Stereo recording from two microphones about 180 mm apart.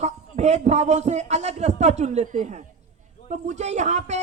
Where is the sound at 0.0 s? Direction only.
40° right (ahead or behind).